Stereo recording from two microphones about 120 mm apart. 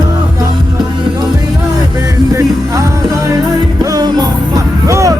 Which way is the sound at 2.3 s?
25° right (ahead or behind).